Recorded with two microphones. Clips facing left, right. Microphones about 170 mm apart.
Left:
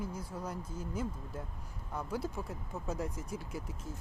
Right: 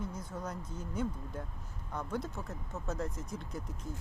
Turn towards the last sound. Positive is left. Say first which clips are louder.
# left 1 dB
turn(degrees=5)  # may be behind; listen again after turning